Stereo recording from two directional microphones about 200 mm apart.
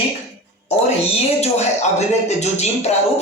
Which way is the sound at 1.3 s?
35° left (ahead or behind).